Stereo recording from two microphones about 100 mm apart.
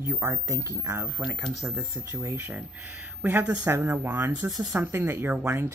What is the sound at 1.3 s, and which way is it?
Speech, 35° right (ahead or behind).